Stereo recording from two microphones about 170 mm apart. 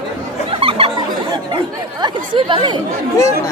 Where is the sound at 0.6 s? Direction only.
30° right (ahead or behind).